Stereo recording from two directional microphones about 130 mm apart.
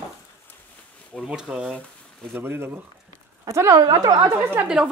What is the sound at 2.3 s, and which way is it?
A woman's voice, 15° right (ahead or behind).